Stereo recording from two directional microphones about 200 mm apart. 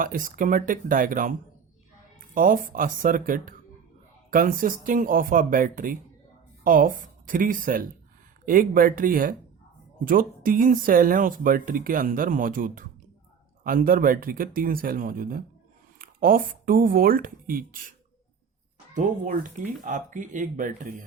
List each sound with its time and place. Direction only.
0.0 s speech: 40° right (ahead or behind)
18.9 s speech: 40° right (ahead or behind)